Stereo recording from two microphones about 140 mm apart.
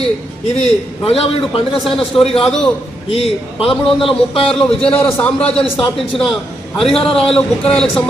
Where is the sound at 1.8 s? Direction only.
Centre (ahead or behind).